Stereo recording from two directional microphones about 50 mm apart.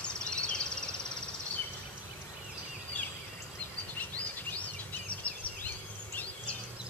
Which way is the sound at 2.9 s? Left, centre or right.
Left.